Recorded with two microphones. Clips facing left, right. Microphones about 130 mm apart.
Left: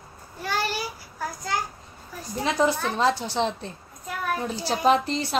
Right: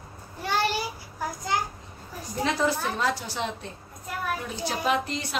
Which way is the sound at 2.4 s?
20° left (ahead or behind).